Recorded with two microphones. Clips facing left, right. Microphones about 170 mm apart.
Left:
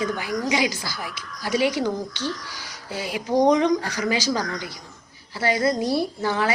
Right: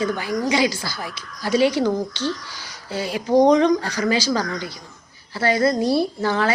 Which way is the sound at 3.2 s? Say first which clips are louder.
Right 4 dB; 25° right (ahead or behind).